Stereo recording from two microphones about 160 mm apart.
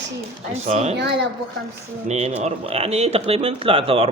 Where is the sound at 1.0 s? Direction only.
90° right.